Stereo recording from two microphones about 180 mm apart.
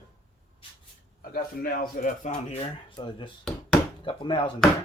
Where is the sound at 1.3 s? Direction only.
55° left (ahead or behind); by 4.5 s 25° left (ahead or behind).